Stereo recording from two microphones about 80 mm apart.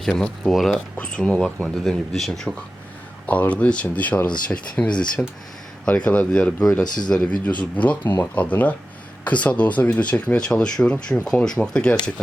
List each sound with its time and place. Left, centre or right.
0.0 s speech: centre
0.9 s speech: centre
3.2 s speech: centre